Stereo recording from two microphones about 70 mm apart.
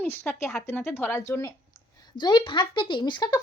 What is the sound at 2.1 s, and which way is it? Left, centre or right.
Speech, left.